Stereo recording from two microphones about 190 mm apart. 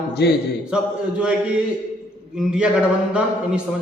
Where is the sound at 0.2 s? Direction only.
60° left (ahead or behind).